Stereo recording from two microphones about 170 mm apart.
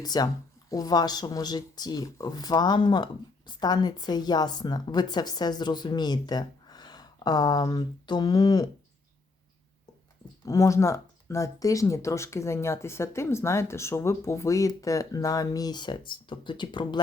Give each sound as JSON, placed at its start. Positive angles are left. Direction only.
{"t": 0.0, "sound": "speech", "side_deg": 25}
{"t": 10.4, "sound": "speech", "side_deg": 20}